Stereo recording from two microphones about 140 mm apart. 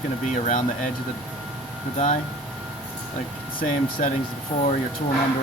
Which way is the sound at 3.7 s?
65° left (ahead or behind).